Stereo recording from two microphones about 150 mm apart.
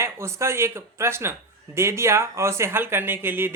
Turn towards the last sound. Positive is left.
turn(degrees=-15)  # may be behind; listen again after turning